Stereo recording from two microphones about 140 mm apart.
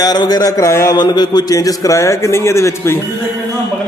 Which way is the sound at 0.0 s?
30° left (ahead or behind).